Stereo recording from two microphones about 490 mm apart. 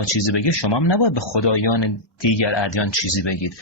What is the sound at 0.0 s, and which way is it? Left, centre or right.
Speech, left.